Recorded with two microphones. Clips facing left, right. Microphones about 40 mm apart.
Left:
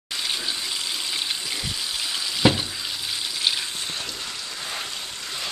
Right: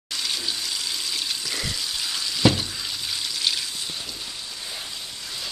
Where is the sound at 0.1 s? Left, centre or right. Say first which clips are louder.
Left 1 dB; centre.